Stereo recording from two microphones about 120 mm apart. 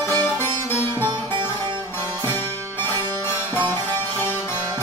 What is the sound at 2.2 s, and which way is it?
Music, 15° left (ahead or behind).